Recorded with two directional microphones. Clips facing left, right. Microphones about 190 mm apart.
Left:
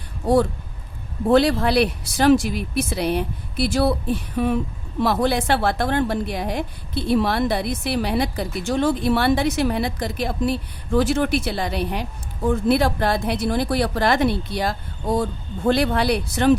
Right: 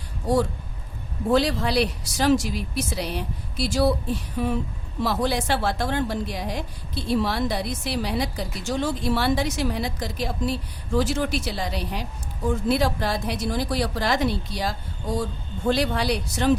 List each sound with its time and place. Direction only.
1.3 s speech: 60° left (ahead or behind)